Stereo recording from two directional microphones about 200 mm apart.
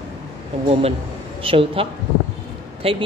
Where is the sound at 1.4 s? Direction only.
25° right (ahead or behind).